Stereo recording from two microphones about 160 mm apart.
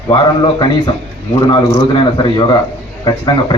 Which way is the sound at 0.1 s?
30° left (ahead or behind).